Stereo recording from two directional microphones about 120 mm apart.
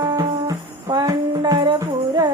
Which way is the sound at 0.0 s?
35° right (ahead or behind).